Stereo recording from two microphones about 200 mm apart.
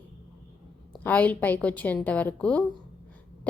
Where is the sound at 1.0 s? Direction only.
10° left (ahead or behind).